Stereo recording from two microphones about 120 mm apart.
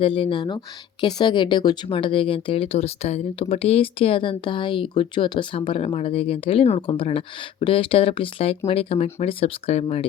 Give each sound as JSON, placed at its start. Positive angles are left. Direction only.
{"t": 0.0, "sound": "speech", "side_deg": 50}